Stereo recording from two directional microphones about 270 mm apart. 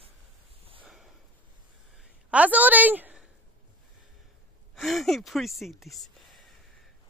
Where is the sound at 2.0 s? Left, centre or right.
Centre.